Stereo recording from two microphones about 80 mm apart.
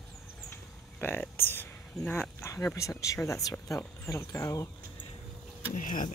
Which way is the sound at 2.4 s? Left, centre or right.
Left.